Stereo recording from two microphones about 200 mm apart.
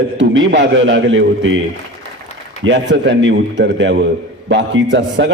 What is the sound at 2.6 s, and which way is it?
A man's voice, 65° right (ahead or behind).